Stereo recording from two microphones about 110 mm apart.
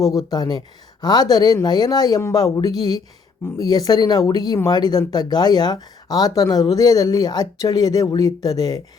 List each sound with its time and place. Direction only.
0.0 s speech: 35° left (ahead or behind)